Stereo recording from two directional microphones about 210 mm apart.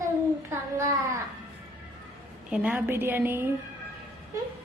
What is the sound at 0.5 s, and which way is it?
Speech, 15° right (ahead or behind).